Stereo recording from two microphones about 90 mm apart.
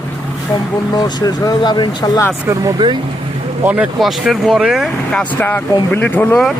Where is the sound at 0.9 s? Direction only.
45° left (ahead or behind).